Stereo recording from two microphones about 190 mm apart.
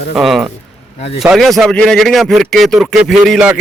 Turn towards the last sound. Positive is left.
turn(degrees=0)  # may be behind; listen again after turning